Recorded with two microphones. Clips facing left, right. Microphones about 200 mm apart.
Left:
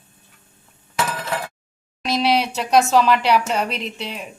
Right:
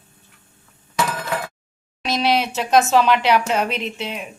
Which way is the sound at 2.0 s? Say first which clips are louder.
Left 1 dB; centre (ahead or behind).